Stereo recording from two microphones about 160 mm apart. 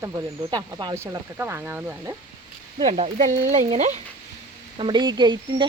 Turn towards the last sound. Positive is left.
turn(degrees=-30)  # may be behind; listen again after turning